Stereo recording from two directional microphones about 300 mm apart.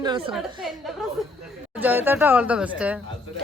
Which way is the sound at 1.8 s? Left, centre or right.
Centre.